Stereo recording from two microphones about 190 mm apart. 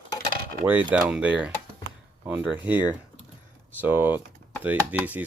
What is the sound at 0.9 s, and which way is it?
Speech, 5° right (ahead or behind).